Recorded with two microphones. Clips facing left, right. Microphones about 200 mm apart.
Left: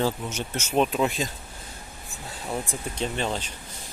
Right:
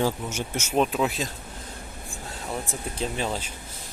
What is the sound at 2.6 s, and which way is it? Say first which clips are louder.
Speech: even; centre (ahead or behind).